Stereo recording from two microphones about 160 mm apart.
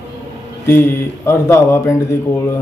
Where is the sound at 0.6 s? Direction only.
15° left (ahead or behind).